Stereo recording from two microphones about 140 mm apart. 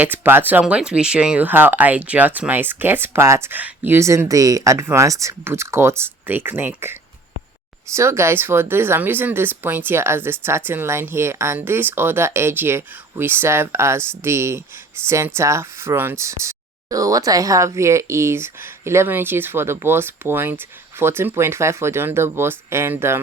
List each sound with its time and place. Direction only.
0.0 s speech: 15° right (ahead or behind)
7.9 s speech: 20° right (ahead or behind)